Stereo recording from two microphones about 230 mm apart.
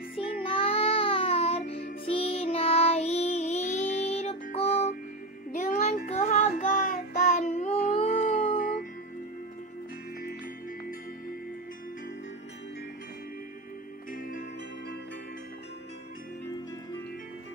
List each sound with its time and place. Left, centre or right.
0.4 s music: left
5.5 s child singing: left
8.1 s howl: left
14.1 s music: left